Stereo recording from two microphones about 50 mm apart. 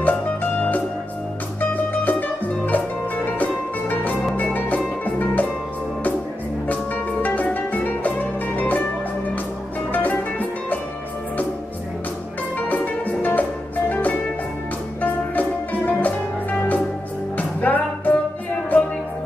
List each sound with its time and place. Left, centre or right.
0.0 s music: left
4.7 s music: left
6.7 s music: left
9.9 s music: left
12.5 s music: left